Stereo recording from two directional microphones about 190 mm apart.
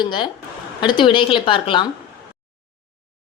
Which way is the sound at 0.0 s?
25° left (ahead or behind).